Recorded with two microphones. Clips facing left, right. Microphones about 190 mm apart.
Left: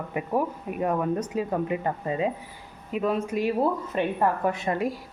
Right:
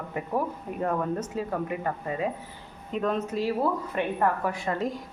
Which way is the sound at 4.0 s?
25° left (ahead or behind).